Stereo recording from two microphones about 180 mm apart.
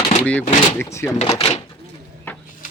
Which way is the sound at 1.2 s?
35° left (ahead or behind).